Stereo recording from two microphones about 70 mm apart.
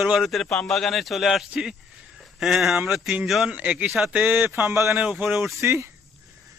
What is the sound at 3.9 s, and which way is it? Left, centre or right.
Speech, centre.